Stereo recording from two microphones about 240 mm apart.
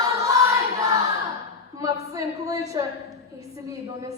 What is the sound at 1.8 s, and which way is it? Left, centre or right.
A woman's voice, centre.